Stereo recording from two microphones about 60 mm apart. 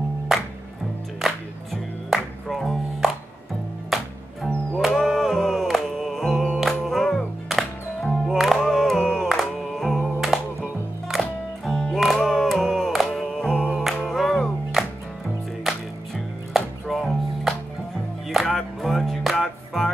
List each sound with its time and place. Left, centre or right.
2.0 s music: centre
13.5 s music: centre
14.0 s music: centre